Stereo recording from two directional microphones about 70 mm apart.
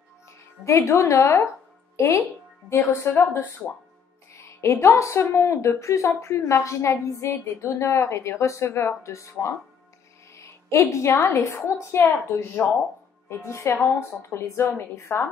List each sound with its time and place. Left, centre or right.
0.7 s a woman's voice: left
4.3 s a woman's voice: left
14.6 s a woman's voice: left
15.0 s a woman's voice: left